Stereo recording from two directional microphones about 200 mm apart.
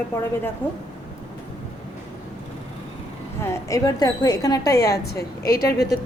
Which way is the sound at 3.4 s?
15° left (ahead or behind).